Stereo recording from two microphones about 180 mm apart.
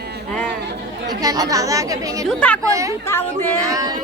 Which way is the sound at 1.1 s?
20° right (ahead or behind).